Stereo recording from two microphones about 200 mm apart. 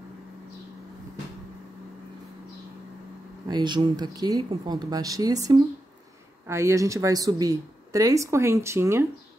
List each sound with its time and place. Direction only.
3.4 s speech: 20° right (ahead or behind)